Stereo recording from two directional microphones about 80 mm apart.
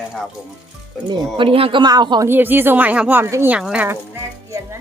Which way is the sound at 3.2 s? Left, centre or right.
Right.